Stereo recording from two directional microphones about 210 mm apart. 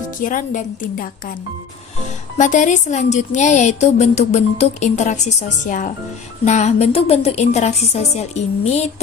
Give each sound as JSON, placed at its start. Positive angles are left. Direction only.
{"t": 0.2, "sound": "a woman's voice", "side_deg": 40}
{"t": 2.4, "sound": "a woman's voice", "side_deg": 35}